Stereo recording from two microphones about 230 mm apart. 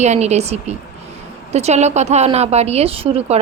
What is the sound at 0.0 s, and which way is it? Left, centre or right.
Speech, right.